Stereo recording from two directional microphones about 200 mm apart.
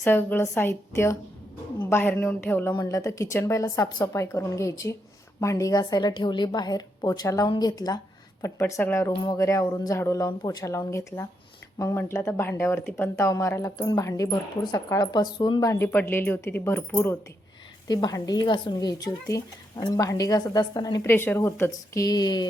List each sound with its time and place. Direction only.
0.0 s speech: 10° left (ahead or behind)
17.8 s speech: 20° left (ahead or behind)